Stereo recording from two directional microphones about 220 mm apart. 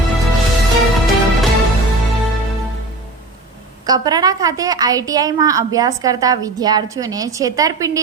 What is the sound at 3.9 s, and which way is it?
A woman's voice, 20° right (ahead or behind).